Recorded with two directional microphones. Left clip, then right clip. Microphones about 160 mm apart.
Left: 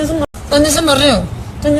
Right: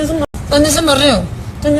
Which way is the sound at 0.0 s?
Centre (ahead or behind).